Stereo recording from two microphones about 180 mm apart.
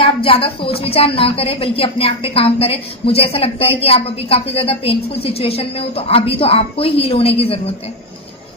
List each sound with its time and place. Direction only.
0.0 s a woman's voice: 30° left (ahead or behind)